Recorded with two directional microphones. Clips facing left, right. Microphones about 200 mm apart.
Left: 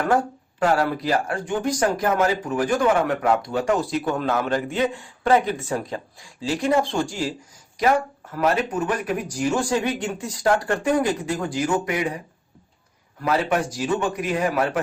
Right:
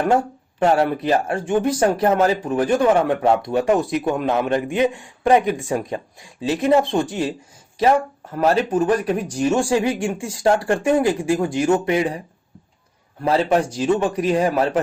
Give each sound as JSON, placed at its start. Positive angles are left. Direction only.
{"t": 0.6, "sound": "speech", "side_deg": -25}
{"t": 13.2, "sound": "speech", "side_deg": -30}